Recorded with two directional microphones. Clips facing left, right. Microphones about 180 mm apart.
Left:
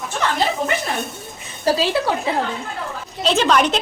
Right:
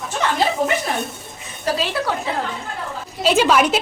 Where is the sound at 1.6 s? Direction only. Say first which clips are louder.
Left 4 dB; 30° left (ahead or behind).